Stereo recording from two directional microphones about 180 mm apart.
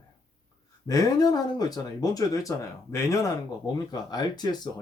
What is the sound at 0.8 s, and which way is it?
Speech, 20° left (ahead or behind).